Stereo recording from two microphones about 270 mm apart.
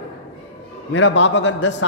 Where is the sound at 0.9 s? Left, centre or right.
Left.